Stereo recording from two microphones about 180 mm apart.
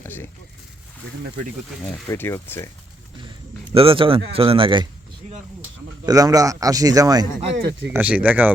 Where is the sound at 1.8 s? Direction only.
10° left (ahead or behind).